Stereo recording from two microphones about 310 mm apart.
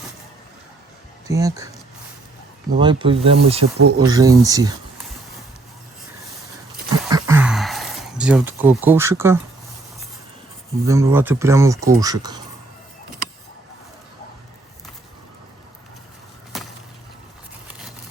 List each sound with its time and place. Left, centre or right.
1.3 s speech: centre
2.7 s speech: centre
3.8 s speech: right
4.0 s speech: centre
7.1 s a sound: centre
10.8 s speech: centre
17.7 s vehicle: centre